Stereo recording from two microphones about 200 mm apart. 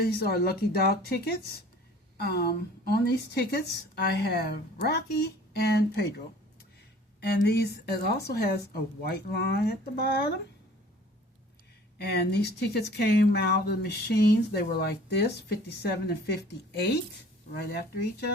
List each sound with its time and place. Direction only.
0.0 s a woman's voice: 50° left (ahead or behind)
11.9 s a woman's voice: 55° left (ahead or behind)